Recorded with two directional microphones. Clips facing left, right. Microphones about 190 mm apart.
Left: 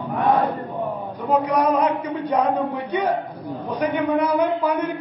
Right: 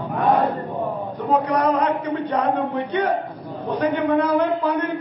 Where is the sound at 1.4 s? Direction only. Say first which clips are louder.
Left 1 dB; 10° left (ahead or behind).